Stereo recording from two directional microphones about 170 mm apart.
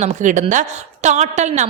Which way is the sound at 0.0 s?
45° right (ahead or behind).